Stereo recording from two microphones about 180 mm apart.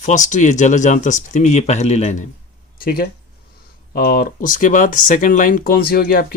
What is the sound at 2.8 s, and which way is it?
Speech, 55° left (ahead or behind).